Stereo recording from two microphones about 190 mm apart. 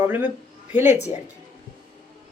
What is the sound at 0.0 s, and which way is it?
Speech, 10° right (ahead or behind).